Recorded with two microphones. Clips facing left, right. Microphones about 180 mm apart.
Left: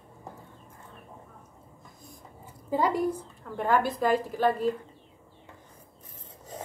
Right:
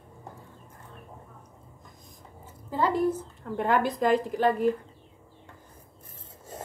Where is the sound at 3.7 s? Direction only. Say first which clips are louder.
Right 1 dB; 15° right (ahead or behind).